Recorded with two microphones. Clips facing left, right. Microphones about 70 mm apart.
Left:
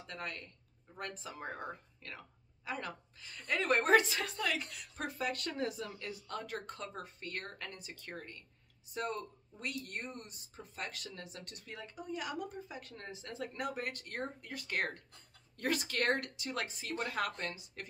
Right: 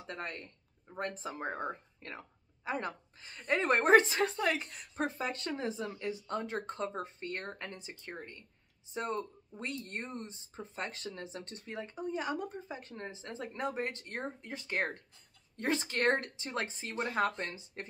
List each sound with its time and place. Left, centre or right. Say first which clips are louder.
0.0 s speech: right 2 dB; right